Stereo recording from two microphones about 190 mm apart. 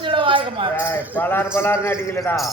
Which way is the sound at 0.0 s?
25° right (ahead or behind).